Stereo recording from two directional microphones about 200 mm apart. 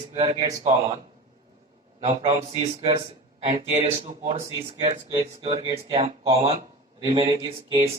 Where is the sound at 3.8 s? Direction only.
30° right (ahead or behind).